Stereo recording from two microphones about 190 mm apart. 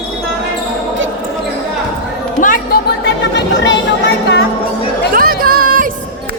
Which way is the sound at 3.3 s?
70° left (ahead or behind).